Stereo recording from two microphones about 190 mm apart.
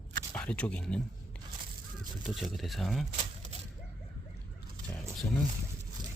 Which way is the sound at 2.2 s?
Centre (ahead or behind).